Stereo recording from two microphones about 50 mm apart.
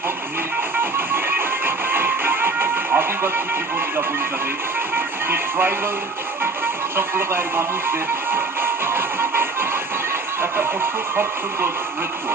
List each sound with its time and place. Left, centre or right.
0.8 s music: right
4.9 s music: right
6.9 s music: right